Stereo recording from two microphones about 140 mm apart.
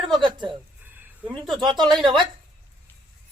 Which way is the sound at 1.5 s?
35° right (ahead or behind).